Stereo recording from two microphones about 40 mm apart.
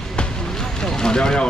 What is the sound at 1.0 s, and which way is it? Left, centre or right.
Speech, centre.